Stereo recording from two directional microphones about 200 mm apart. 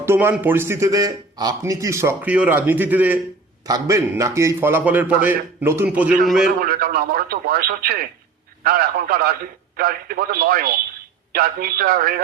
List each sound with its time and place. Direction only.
0.0 s a man's voice: 10° right (ahead or behind)
6.6 s speech: 45° right (ahead or behind)